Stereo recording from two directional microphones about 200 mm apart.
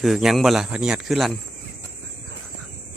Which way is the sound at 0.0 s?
Centre (ahead or behind).